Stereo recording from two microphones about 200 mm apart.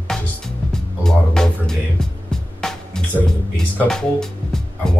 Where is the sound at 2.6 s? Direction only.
5° left (ahead or behind).